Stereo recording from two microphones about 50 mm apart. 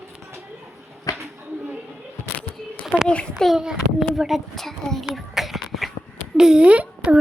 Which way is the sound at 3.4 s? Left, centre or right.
Centre.